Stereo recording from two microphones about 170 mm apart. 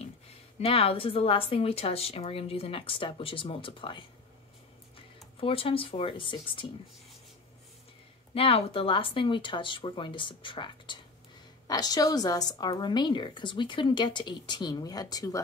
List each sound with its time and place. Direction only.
0.6 s speech: 35° left (ahead or behind)
5.4 s speech: 35° left (ahead or behind)
8.4 s a woman's voice: 35° left (ahead or behind)